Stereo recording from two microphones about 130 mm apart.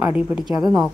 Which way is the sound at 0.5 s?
25° right (ahead or behind).